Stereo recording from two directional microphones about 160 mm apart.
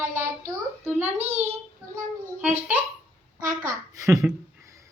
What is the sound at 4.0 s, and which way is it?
Speech, 20° right (ahead or behind).